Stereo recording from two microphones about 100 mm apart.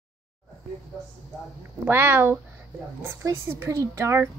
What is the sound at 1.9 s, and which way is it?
Speech, 20° right (ahead or behind).